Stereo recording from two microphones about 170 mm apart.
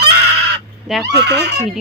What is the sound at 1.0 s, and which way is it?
Speech, 75° right (ahead or behind).